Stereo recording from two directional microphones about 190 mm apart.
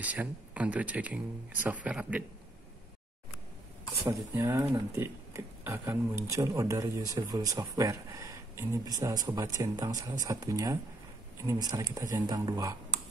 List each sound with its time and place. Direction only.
0.0 s speech: 10° right (ahead or behind)
3.9 s speech: centre (ahead or behind)
4.4 s speech: 15° right (ahead or behind)